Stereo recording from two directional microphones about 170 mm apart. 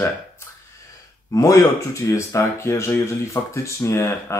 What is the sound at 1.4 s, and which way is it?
Speech, 20° left (ahead or behind).